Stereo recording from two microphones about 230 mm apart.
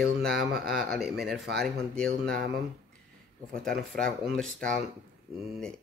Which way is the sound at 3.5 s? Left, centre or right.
Centre.